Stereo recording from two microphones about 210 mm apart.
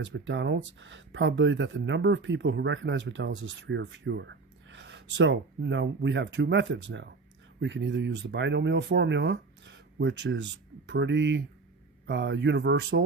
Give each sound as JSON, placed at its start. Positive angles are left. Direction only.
{"t": 0.0, "sound": "speech", "side_deg": -60}